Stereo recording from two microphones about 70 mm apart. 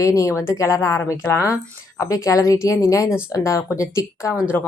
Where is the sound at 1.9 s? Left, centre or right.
Left.